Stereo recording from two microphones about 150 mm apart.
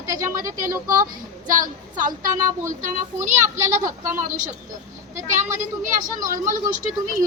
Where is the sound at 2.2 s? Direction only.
20° right (ahead or behind).